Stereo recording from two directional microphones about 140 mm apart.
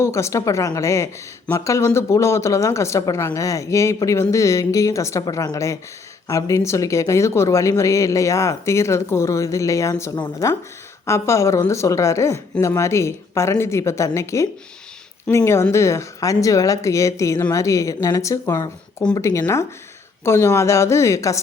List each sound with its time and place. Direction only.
0.0 s speech: 20° left (ahead or behind)